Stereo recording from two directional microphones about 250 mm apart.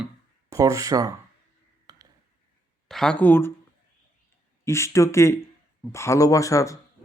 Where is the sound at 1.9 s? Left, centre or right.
Centre.